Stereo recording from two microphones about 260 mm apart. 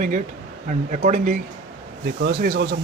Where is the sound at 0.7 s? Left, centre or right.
Right.